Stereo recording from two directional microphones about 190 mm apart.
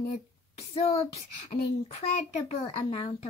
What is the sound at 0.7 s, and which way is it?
A child's voice, 30° left (ahead or behind).